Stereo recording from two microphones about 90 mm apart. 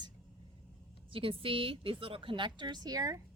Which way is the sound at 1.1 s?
75° right (ahead or behind).